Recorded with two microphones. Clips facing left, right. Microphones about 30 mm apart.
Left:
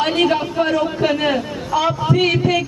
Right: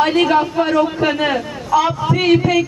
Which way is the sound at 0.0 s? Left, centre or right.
Centre.